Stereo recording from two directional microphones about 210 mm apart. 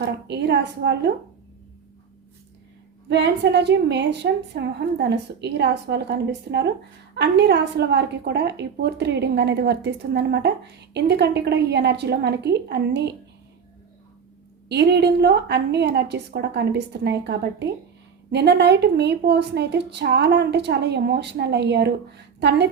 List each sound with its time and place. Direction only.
0.0 s a woman's voice: 55° right (ahead or behind)
3.1 s a woman's voice: 55° right (ahead or behind)
14.7 s a woman's voice: 55° right (ahead or behind)